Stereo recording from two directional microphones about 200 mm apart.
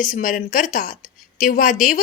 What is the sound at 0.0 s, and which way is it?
A woman's voice, 40° left (ahead or behind).